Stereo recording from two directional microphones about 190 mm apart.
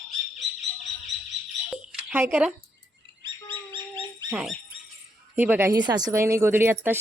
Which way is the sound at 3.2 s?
25° right (ahead or behind).